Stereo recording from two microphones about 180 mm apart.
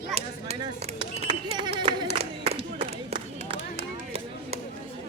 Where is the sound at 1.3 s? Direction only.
25° right (ahead or behind).